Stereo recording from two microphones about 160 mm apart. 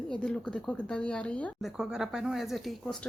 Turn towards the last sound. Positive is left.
turn(degrees=5)  # may be behind; listen again after turning